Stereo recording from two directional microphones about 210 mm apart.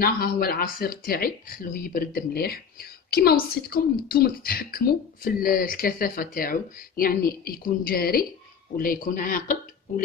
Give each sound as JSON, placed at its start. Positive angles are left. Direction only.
{"t": 0.0, "sound": "speech", "side_deg": 45}